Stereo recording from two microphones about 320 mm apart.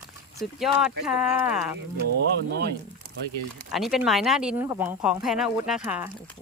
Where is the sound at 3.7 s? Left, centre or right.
Centre.